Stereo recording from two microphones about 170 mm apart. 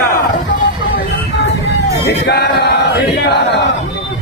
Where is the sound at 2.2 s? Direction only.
80° left.